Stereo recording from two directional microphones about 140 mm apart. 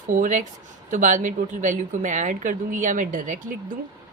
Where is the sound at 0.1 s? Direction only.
65° right (ahead or behind).